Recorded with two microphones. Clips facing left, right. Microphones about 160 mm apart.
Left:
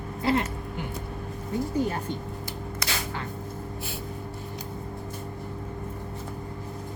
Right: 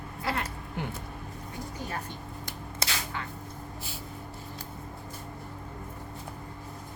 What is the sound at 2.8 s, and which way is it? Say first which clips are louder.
Single-lens reflex camera: left 1 dB; 25° right (ahead or behind).